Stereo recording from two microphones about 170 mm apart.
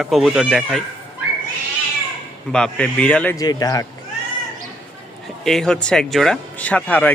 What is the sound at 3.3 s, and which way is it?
Speech, 20° left (ahead or behind).